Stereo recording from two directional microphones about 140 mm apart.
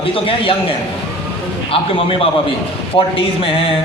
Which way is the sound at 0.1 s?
40° left (ahead or behind).